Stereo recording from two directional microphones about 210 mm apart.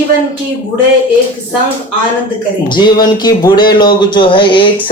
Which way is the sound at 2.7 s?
20° left (ahead or behind).